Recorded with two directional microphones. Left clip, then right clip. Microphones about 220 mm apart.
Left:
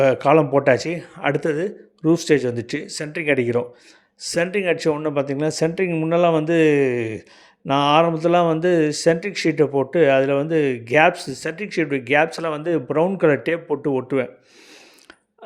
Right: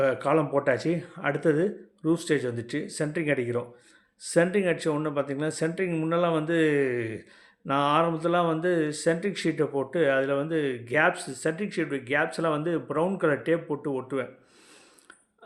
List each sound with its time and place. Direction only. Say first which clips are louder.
0.0 s a man's voice: left 9 dB; 35° left (ahead or behind)